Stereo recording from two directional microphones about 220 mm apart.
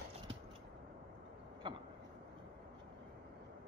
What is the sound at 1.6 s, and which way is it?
Vehicle, 20° right (ahead or behind).